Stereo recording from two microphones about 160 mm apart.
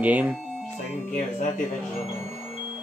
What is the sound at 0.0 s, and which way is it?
Speech, 10° right (ahead or behind).